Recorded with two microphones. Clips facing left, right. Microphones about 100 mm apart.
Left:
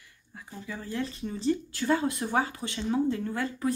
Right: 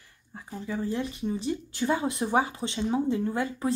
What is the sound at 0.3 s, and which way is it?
Speech, 30° right (ahead or behind).